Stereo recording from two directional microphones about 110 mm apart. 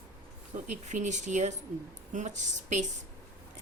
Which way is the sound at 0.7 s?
90° right.